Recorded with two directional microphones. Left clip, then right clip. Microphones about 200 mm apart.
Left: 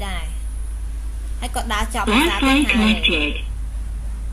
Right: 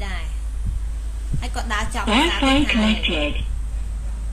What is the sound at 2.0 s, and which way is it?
A woman's voice, 5° right (ahead or behind).